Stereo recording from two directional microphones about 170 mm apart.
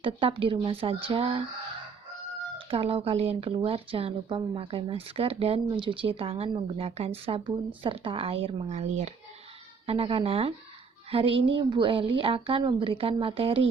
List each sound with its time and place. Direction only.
0.0 s speech: 30° right (ahead or behind)
2.6 s speech: 35° right (ahead or behind)